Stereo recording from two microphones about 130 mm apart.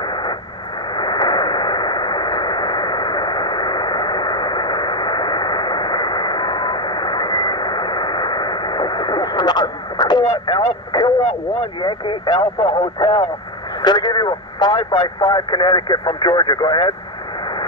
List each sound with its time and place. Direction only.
0.9 s radio: 35° left (ahead or behind)
11.8 s speech: 40° left (ahead or behind)